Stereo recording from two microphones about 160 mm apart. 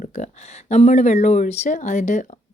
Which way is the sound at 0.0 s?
50° left (ahead or behind).